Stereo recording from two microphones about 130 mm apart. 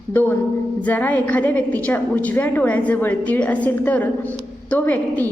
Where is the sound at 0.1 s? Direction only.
15° left (ahead or behind).